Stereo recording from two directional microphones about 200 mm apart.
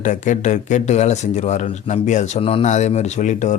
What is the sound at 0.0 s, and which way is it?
Speech, 40° left (ahead or behind).